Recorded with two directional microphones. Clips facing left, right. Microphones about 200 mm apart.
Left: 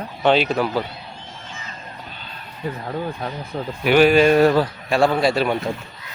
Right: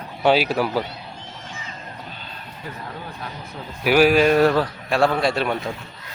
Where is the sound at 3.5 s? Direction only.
35° left (ahead or behind).